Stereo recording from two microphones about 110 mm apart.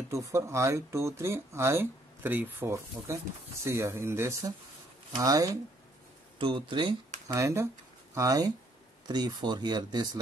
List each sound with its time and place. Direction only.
0.1 s speech: 25° right (ahead or behind)
6.3 s speech: 50° right (ahead or behind)
7.3 s speech: 25° right (ahead or behind)